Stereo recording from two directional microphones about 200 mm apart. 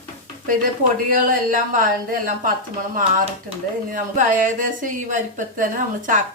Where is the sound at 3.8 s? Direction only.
40° right (ahead or behind).